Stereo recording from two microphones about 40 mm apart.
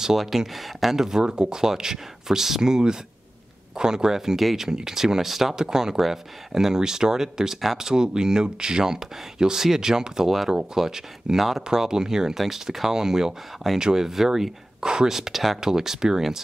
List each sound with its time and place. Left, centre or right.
0.0 s speech: centre
4.4 s speech: centre
4.6 s speech: centre